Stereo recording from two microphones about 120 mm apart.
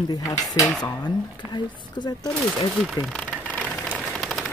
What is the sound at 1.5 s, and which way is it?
Speech, 40° left (ahead or behind).